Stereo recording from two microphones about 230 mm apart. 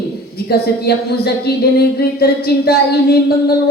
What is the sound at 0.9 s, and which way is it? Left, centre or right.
A woman's voice, left.